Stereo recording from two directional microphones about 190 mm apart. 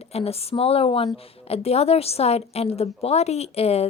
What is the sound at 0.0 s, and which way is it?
Speech, 30° left (ahead or behind).